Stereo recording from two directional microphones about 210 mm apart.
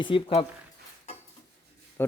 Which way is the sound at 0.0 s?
25° left (ahead or behind).